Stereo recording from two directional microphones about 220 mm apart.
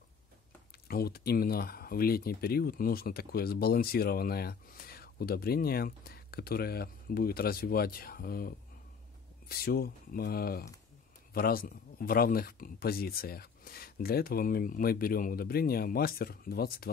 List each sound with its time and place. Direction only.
0.8 s speech: 45° left (ahead or behind)